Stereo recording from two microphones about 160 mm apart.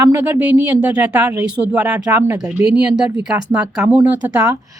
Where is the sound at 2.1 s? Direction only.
20° right (ahead or behind).